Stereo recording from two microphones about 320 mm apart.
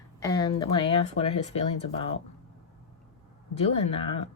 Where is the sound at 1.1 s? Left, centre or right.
Centre.